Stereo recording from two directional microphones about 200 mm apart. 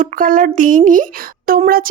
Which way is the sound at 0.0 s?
45° right (ahead or behind).